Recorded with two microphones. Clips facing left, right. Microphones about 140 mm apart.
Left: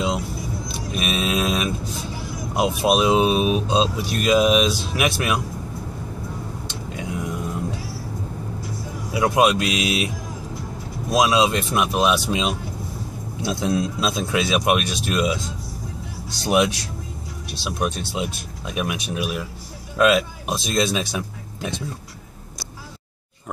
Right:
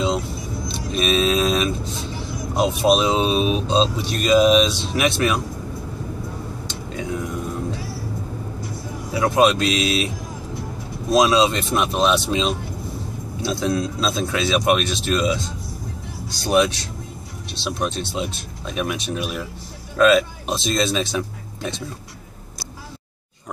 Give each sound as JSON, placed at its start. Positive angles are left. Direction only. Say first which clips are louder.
{"t": 0.7, "sound": "vehicle", "louder": "right 6 dB", "side_deg": 10}
{"t": 2.5, "sound": "speech", "louder": "right 2 dB", "side_deg": 10}
{"t": 9.1, "sound": "speech", "louder": "right 1 dB", "side_deg": 15}
{"t": 11.1, "sound": "speech", "louder": "right 2 dB", "side_deg": 10}
{"t": 16.4, "sound": "speech", "louder": "right 1 dB", "side_deg": 15}